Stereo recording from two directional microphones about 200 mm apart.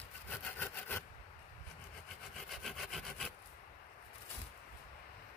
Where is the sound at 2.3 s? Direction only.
Centre (ahead or behind).